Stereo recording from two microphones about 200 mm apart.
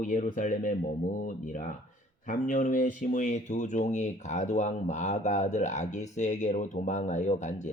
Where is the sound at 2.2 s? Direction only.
40° left (ahead or behind).